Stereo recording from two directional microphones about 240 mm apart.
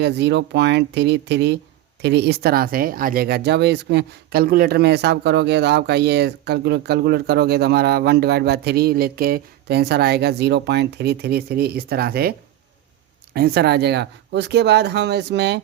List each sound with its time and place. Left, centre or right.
0.0 s speech: right
13.3 s speech: right